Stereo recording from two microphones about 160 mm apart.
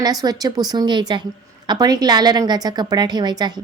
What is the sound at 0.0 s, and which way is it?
A woman's voice, 25° right (ahead or behind).